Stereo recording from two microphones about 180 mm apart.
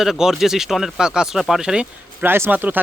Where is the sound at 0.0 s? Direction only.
Centre (ahead or behind).